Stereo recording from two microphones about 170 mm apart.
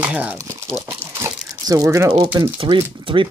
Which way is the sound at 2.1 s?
25° right (ahead or behind).